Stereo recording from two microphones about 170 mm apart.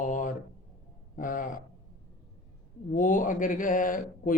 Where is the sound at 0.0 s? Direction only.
50° left (ahead or behind).